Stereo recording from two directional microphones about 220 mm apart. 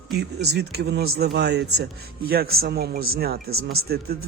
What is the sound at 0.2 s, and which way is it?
Speech, 50° right (ahead or behind).